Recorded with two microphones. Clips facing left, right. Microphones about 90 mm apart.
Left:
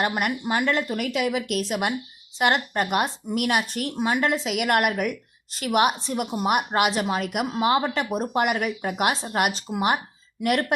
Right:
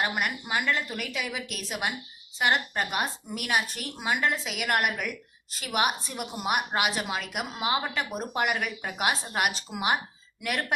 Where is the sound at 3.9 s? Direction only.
30° left (ahead or behind).